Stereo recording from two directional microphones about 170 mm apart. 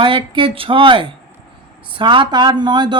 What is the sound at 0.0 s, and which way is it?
Speech, 30° right (ahead or behind).